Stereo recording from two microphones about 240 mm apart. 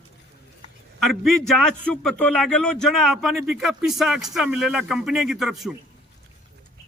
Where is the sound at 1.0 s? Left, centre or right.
Centre.